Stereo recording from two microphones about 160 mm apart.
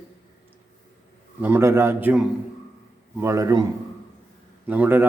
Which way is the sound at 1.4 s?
15° right (ahead or behind).